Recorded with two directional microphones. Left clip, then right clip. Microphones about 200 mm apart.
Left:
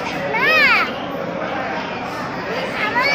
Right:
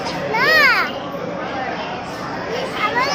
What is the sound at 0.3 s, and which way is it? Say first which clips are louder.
Children playing: right 1 dB; 20° right (ahead or behind).